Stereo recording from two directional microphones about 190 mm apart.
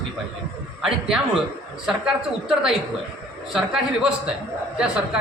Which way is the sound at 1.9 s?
Centre (ahead or behind).